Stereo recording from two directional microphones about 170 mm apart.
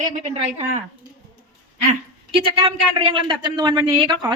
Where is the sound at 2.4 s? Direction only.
30° right (ahead or behind).